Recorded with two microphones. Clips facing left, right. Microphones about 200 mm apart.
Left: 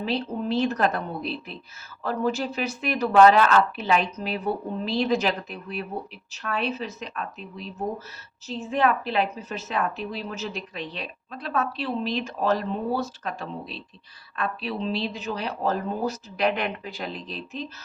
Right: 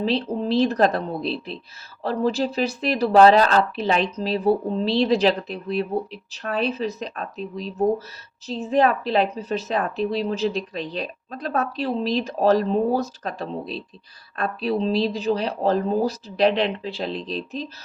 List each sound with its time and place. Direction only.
0.0 s speech: 35° right (ahead or behind)